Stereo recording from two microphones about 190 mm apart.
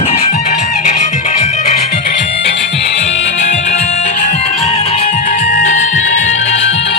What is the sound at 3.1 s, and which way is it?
Music, 70° left (ahead or behind).